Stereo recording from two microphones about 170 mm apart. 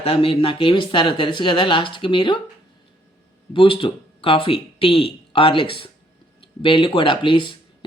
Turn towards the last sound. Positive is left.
turn(degrees=30)  # may be behind; listen again after turning